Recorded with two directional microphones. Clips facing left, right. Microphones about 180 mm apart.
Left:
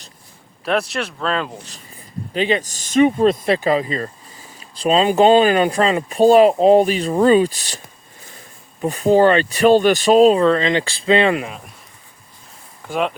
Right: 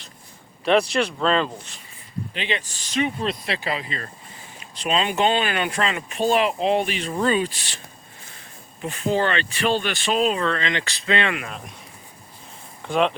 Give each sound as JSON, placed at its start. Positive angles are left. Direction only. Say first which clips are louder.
{"t": 0.6, "sound": "speech", "louder": "right 2 dB", "side_deg": 0}
{"t": 2.3, "sound": "speech", "louder": "left 11 dB", "side_deg": 40}
{"t": 8.8, "sound": "speech", "louder": "left 9 dB", "side_deg": 40}
{"t": 12.9, "sound": "speech", "louder": "even", "side_deg": 5}